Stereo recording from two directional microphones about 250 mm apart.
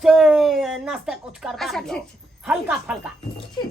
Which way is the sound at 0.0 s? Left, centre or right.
Centre.